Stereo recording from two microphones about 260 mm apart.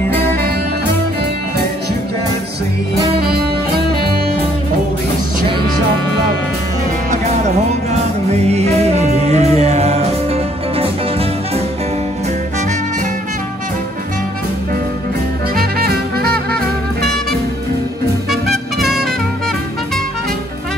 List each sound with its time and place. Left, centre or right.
8.3 s music: right
15.5 s music: right
18.3 s music: centre